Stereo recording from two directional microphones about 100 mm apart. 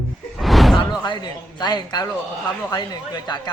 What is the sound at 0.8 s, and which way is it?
Speech, 50° left (ahead or behind).